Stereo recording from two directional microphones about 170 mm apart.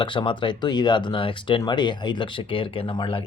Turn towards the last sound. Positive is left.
turn(degrees=30)  # may be behind; listen again after turning